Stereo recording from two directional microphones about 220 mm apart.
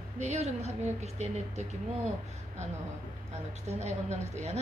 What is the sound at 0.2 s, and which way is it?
A woman's voice, 30° right (ahead or behind).